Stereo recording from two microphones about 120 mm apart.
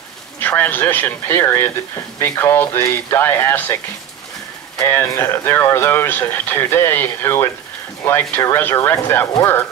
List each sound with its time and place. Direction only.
0.4 s speech: 15° left (ahead or behind)